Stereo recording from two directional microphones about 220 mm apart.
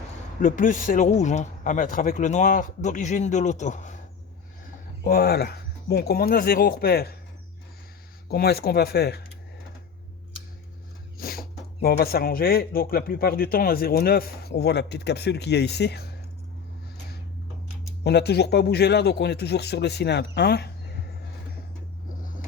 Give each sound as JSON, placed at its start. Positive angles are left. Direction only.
{"t": 0.4, "sound": "a man's voice", "side_deg": 35}
{"t": 5.0, "sound": "speech", "side_deg": 45}
{"t": 8.3, "sound": "speech", "side_deg": 45}
{"t": 11.2, "sound": "speech", "side_deg": 45}
{"t": 18.0, "sound": "speech", "side_deg": 50}